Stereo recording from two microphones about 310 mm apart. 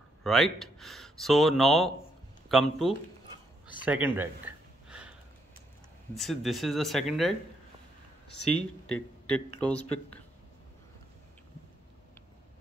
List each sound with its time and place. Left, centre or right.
0.2 s speech: centre
3.8 s a sound: centre
6.1 s speech: centre
8.4 s speech: left
9.6 s speech: centre